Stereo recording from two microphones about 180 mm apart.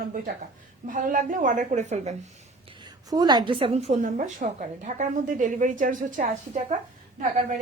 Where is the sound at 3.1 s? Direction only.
20° right (ahead or behind).